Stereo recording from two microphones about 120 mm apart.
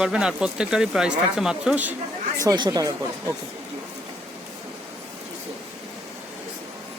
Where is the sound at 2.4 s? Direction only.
35° right (ahead or behind).